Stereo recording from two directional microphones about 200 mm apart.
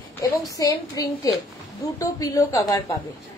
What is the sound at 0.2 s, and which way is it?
A woman's voice, 20° left (ahead or behind).